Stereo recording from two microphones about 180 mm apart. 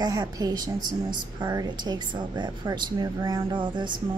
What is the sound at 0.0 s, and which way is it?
A woman's voice, 20° right (ahead or behind).